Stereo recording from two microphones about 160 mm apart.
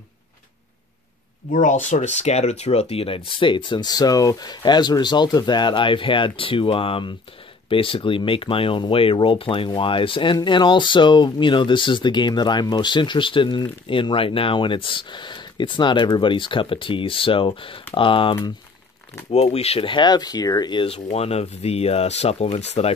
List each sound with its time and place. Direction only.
1.5 s speech: 50° left (ahead or behind)